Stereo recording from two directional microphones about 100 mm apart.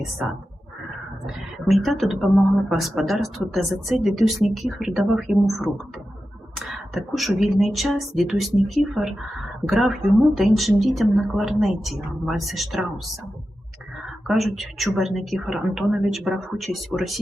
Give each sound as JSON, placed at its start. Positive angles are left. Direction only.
{"t": 1.2, "sound": "speech", "side_deg": 0}
{"t": 14.3, "sound": "speech", "side_deg": 0}